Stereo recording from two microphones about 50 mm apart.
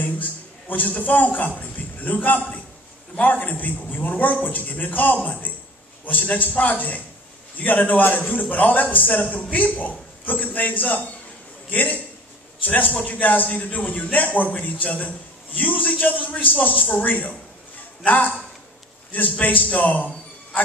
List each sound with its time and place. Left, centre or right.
0.0 s a man's voice: left
19.4 s a man's voice: left